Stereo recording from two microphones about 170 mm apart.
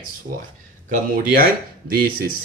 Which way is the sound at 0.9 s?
55° right (ahead or behind).